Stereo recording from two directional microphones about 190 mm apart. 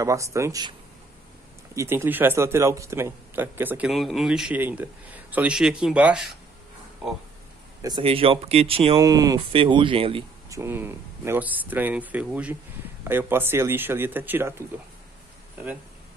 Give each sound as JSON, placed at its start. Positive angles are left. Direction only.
{"t": 0.0, "sound": "speech", "side_deg": -15}
{"t": 1.8, "sound": "speech", "side_deg": -15}
{"t": 7.8, "sound": "speech", "side_deg": -25}
{"t": 9.0, "sound": "speech", "side_deg": -20}
{"t": 10.5, "sound": "speech", "side_deg": -15}